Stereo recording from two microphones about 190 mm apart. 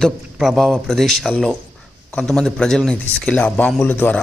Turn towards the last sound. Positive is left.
turn(degrees=10)  # may be behind; listen again after turning